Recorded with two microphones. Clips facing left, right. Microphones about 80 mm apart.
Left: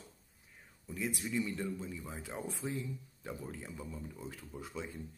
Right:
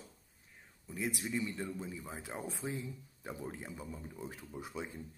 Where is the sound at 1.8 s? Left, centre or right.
Centre.